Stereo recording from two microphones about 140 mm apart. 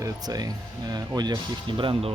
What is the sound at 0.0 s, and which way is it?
Speech, 30° right (ahead or behind).